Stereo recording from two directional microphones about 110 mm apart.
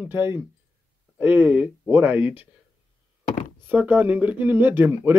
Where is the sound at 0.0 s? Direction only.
20° right (ahead or behind).